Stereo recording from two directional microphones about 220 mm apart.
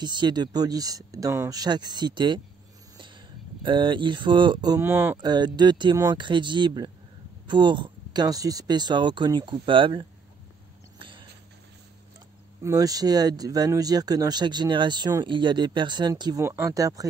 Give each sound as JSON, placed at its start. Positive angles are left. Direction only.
{"t": 0.0, "sound": "speech", "side_deg": -20}
{"t": 11.0, "sound": "dog", "side_deg": -20}
{"t": 12.6, "sound": "speech", "side_deg": -15}